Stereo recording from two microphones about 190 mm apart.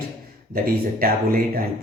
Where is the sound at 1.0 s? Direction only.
50° right (ahead or behind).